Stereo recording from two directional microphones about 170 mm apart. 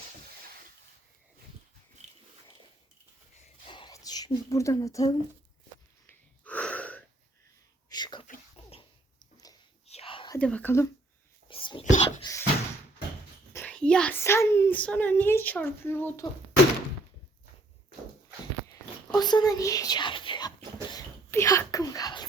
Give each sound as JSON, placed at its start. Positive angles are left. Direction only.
{"t": 3.7, "sound": "a sound", "side_deg": 25}
{"t": 6.4, "sound": "wheeze", "side_deg": 10}
{"t": 7.9, "sound": "whispering", "side_deg": 25}
{"t": 8.6, "sound": "dog", "side_deg": 35}
{"t": 9.8, "sound": "whispering", "side_deg": 35}
{"t": 10.3, "sound": "speech", "side_deg": 10}
{"t": 11.4, "sound": "whispering", "side_deg": 30}
{"t": 11.9, "sound": "a sound", "side_deg": 25}
{"t": 13.5, "sound": "a child's voice", "side_deg": 10}
{"t": 18.7, "sound": "whispering", "side_deg": 25}
{"t": 20.9, "sound": "a sound", "side_deg": 15}